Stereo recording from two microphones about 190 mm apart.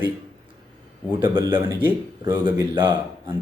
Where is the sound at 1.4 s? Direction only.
20° right (ahead or behind).